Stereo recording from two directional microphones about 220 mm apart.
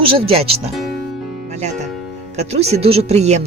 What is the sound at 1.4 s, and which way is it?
Music, 30° right (ahead or behind).